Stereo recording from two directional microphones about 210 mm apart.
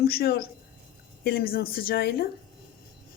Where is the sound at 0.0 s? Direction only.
45° left (ahead or behind).